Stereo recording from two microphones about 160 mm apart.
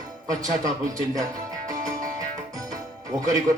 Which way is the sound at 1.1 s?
20° right (ahead or behind).